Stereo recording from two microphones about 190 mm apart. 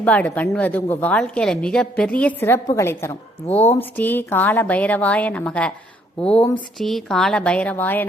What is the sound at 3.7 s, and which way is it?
A woman's voice, 10° left (ahead or behind).